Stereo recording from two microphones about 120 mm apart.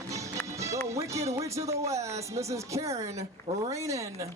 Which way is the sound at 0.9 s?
25° right (ahead or behind).